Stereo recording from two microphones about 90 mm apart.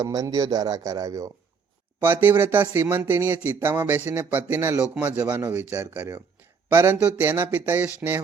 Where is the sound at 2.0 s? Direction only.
25° right (ahead or behind).